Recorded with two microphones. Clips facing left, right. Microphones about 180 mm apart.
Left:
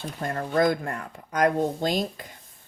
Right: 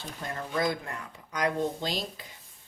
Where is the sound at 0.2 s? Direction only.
50° left (ahead or behind).